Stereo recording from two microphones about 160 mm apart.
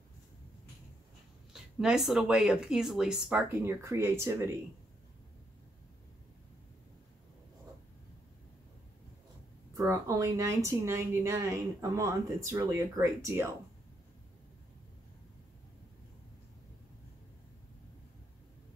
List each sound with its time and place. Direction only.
1.5 s speech: 5° right (ahead or behind)
9.8 s speech: 20° right (ahead or behind)